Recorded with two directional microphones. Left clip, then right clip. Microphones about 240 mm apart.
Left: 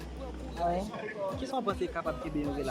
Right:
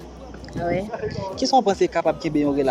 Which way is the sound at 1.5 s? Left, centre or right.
Right.